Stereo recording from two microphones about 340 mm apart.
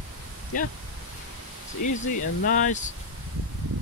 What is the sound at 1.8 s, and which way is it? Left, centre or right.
Speech, left.